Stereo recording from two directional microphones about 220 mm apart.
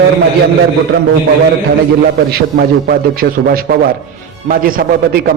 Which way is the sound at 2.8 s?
40° right (ahead or behind).